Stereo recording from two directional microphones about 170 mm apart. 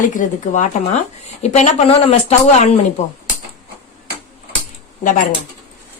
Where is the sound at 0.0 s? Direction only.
50° left (ahead or behind).